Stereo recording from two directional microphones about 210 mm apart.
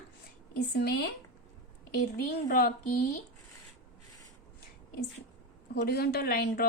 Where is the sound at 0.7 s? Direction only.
50° left (ahead or behind).